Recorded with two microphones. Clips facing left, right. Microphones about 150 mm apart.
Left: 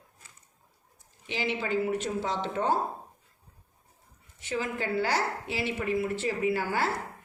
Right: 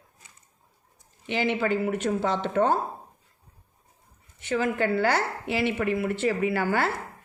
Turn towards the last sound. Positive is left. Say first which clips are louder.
# right 3 dB
turn(degrees=-65)  # may be behind; listen again after turning